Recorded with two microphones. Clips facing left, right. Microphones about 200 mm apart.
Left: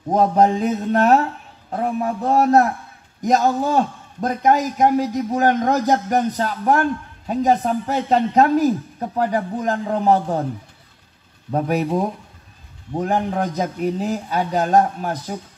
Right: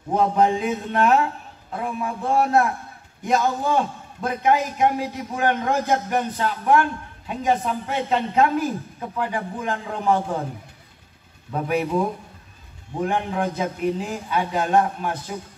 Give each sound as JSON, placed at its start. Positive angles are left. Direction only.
{"t": 0.1, "sound": "a man's voice", "side_deg": 40}
{"t": 11.5, "sound": "a man's voice", "side_deg": 40}